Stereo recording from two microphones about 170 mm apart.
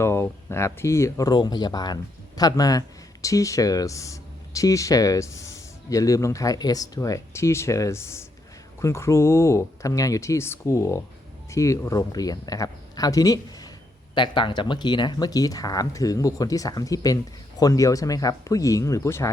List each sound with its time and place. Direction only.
0.0 s speech: 15° left (ahead or behind)